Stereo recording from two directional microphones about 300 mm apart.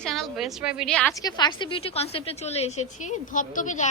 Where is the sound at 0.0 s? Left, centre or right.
Centre.